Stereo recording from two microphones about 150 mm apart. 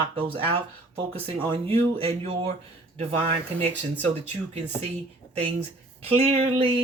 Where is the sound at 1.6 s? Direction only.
40° right (ahead or behind).